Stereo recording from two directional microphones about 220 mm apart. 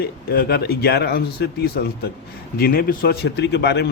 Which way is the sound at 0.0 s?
45° left (ahead or behind).